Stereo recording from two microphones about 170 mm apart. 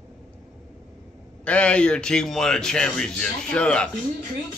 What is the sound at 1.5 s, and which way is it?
A man's voice, 5° left (ahead or behind).